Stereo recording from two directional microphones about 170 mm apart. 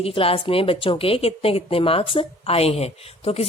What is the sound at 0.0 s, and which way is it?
Speech, 35° left (ahead or behind).